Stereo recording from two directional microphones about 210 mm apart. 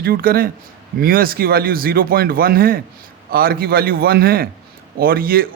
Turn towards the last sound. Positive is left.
turn(degrees=-45)  # may be behind; listen again after turning